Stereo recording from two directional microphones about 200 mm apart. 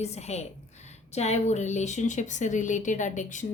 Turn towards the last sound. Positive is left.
turn(degrees=40)  # may be behind; listen again after turning